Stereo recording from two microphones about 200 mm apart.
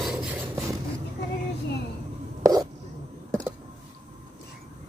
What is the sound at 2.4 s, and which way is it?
Hiccup, 20° right (ahead or behind).